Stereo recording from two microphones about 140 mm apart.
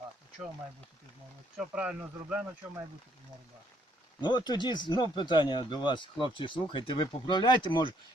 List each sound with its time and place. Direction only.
1.5 s speech: 5° right (ahead or behind)
4.2 s speech: 30° left (ahead or behind)